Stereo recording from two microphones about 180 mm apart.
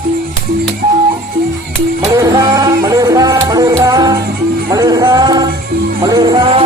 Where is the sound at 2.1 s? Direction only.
20° right (ahead or behind).